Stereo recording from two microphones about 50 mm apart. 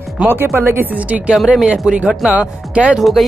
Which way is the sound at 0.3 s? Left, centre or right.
Right.